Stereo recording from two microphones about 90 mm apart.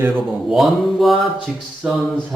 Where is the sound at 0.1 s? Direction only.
Centre (ahead or behind).